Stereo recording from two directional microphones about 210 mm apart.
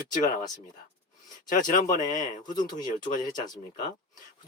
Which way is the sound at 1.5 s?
40° left (ahead or behind).